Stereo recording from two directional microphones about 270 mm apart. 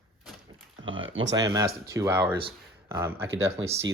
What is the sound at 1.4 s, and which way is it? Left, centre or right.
Speech, centre.